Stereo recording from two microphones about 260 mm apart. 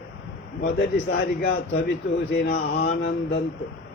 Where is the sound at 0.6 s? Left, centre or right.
Left.